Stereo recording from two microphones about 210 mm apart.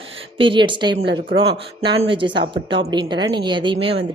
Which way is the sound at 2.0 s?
25° right (ahead or behind).